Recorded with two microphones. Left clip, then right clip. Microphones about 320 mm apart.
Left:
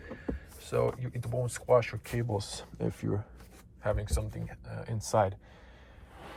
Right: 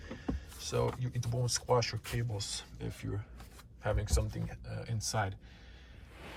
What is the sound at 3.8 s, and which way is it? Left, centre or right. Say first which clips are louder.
Speech: left 2 dB; centre.